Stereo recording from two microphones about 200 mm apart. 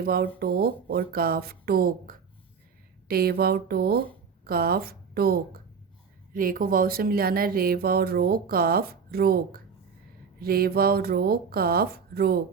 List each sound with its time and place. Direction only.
0.0 s a woman's voice: 50° right (ahead or behind)